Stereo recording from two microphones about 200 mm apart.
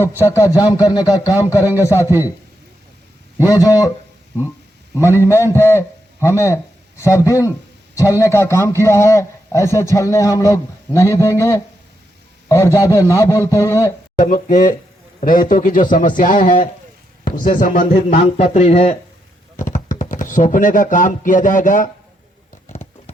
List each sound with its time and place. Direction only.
0.2 s a man's voice: 15° left (ahead or behind)
3.4 s a man's voice: 15° left (ahead or behind)
5.5 s a man's voice: 15° left (ahead or behind)
14.2 s a man's voice: 40° left (ahead or behind)
18.1 s speech: 30° left (ahead or behind)